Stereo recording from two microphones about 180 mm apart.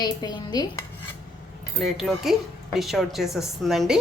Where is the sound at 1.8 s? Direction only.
Centre (ahead or behind).